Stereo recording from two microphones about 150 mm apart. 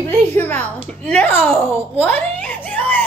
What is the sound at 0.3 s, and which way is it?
A woman's voice, 10° left (ahead or behind).